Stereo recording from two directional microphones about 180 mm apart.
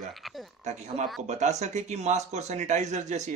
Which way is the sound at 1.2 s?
40° right (ahead or behind).